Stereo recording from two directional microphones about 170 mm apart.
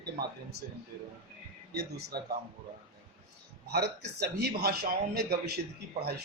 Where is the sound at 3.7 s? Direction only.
70° right (ahead or behind).